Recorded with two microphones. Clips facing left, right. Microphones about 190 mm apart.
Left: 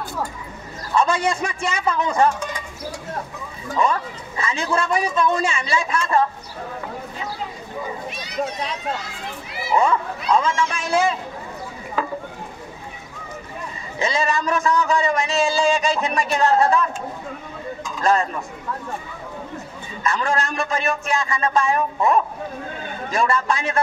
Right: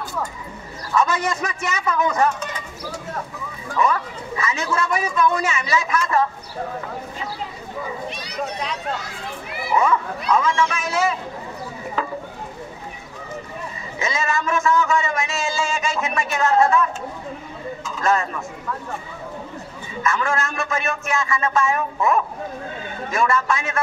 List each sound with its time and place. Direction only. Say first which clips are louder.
0.9 s a man's voice: left 1 dB; 30° left (ahead or behind)
4.4 s a man's voice: left 1 dB; 30° left (ahead or behind)
9.8 s a man's voice: even; 30° left (ahead or behind)
13.9 s a man's voice: left 2 dB; 30° left (ahead or behind)
20.0 s a man's voice: even; 35° left (ahead or behind)